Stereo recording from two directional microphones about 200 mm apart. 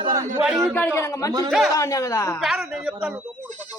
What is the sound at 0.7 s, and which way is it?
Speech, 10° left (ahead or behind).